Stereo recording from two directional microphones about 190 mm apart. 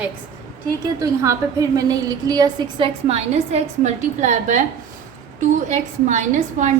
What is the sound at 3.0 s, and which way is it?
A woman's voice, 35° right (ahead or behind).